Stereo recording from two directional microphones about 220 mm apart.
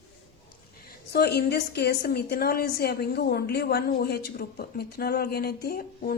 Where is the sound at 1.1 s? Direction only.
50° left (ahead or behind).